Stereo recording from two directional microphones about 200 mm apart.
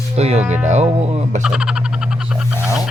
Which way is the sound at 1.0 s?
30° right (ahead or behind).